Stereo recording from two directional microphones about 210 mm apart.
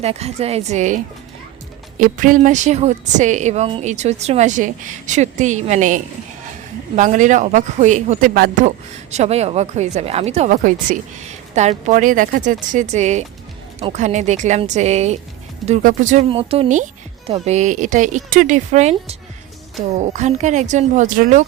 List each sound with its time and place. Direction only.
0.0 s speech: 30° right (ahead or behind)
16.3 s speech: 25° right (ahead or behind)